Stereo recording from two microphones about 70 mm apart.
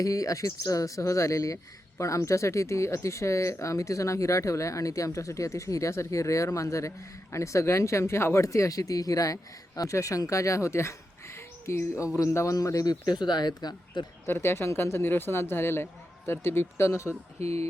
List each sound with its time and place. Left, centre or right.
0.0 s speech: left
12.5 s speech: left
14.3 s speech: left